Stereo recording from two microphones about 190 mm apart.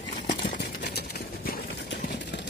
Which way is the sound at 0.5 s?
60° left (ahead or behind).